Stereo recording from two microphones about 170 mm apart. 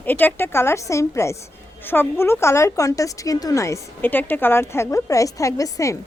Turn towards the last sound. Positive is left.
turn(degrees=20)  # may be behind; listen again after turning